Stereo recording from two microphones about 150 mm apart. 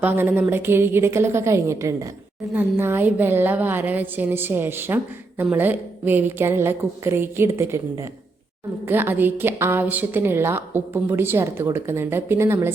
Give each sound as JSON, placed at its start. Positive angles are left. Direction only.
{"t": 0.0, "sound": "a woman's voice", "side_deg": -10}